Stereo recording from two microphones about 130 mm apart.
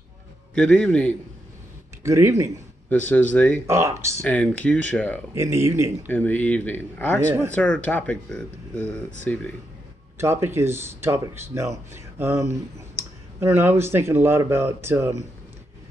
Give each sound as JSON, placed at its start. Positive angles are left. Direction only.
{"t": 0.6, "sound": "speech", "side_deg": 5}
{"t": 2.0, "sound": "speech", "side_deg": -20}
{"t": 2.9, "sound": "speech", "side_deg": 10}
{"t": 3.6, "sound": "speech", "side_deg": -20}
{"t": 4.2, "sound": "speech", "side_deg": 10}
{"t": 5.3, "sound": "speech", "side_deg": -20}
{"t": 6.0, "sound": "speech", "side_deg": 15}
{"t": 10.1, "sound": "speech", "side_deg": -20}